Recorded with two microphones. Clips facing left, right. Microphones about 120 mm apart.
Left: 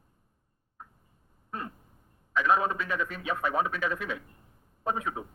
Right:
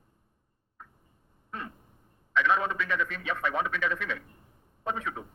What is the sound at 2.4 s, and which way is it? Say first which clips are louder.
A man's voice: left 1 dB; 40° left (ahead or behind).